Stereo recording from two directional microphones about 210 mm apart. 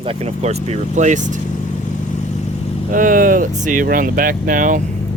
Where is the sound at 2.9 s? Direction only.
40° right (ahead or behind).